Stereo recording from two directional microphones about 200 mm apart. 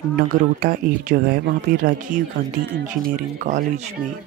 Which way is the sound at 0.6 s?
45° right (ahead or behind).